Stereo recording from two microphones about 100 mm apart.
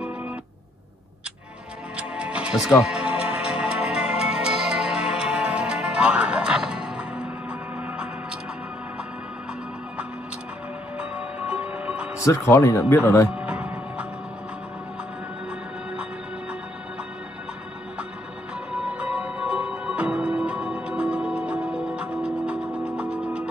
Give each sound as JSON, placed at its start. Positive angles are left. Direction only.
{"t": 2.0, "sound": "music", "side_deg": -10}
{"t": 11.0, "sound": "music", "side_deg": -10}
{"t": 12.2, "sound": "speech", "side_deg": 30}
{"t": 13.3, "sound": "music", "side_deg": -10}
{"t": 18.7, "sound": "music", "side_deg": -10}